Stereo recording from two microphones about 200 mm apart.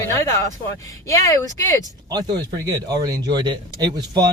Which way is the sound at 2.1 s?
20° right (ahead or behind).